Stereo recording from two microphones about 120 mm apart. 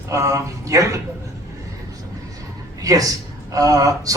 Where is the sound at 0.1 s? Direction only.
25° right (ahead or behind).